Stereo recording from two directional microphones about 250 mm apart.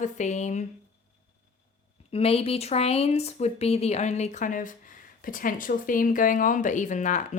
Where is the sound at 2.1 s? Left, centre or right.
Left.